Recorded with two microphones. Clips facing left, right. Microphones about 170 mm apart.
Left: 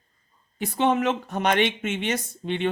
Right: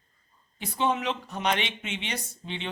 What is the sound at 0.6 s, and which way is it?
Speech, 55° left (ahead or behind).